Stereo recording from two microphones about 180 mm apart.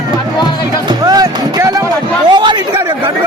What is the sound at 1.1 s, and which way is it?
Music, 20° right (ahead or behind).